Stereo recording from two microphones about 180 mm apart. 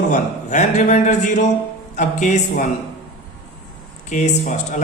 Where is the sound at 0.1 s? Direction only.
45° left (ahead or behind).